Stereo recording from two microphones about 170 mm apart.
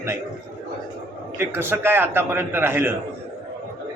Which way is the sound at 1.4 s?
15° right (ahead or behind).